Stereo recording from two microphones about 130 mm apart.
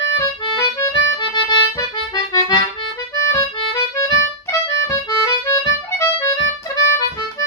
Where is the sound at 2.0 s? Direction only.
30° left (ahead or behind).